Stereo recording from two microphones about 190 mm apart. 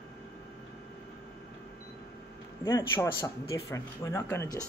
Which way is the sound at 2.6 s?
15° left (ahead or behind).